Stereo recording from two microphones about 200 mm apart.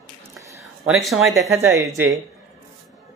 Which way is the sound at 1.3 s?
15° right (ahead or behind).